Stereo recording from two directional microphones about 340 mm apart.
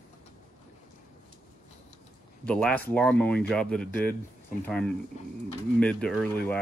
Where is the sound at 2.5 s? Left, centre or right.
Centre.